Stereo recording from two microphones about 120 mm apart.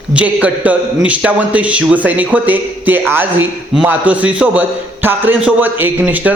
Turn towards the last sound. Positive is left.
turn(degrees=-15)  # may be behind; listen again after turning